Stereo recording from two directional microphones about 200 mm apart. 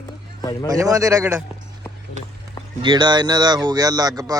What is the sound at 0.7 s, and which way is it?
Speech, 15° right (ahead or behind).